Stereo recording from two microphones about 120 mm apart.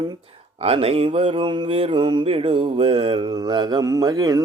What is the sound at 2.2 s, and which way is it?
Mantra, 55° right (ahead or behind).